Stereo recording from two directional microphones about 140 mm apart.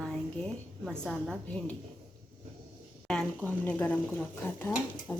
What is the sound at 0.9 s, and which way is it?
Speech, centre (ahead or behind).